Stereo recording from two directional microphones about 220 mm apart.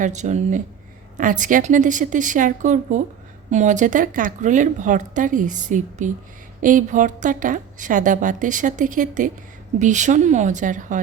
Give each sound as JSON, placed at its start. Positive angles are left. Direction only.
{"t": 0.0, "sound": "a woman's voice", "side_deg": -30}